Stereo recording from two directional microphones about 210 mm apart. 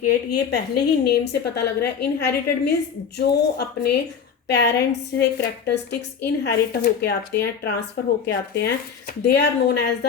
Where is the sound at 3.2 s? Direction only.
50° left (ahead or behind).